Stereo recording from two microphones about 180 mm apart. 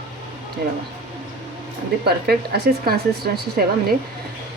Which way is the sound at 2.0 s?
60° right (ahead or behind).